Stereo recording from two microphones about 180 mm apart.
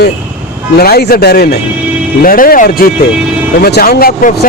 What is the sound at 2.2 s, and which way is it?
A man's voice, 50° left (ahead or behind).